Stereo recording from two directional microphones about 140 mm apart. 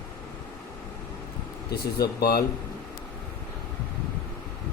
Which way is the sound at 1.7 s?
90° left.